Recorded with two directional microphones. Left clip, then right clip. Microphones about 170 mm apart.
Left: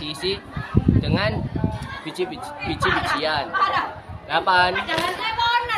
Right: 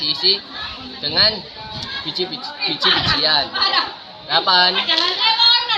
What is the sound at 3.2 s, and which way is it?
Speech, 15° left (ahead or behind).